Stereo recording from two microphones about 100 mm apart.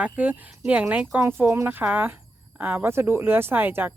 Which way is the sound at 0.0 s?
15° right (ahead or behind).